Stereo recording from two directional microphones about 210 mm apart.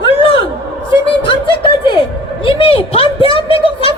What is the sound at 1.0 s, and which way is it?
Speech, 25° left (ahead or behind).